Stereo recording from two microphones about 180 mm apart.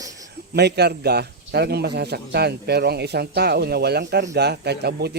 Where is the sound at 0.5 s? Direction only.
65° right (ahead or behind).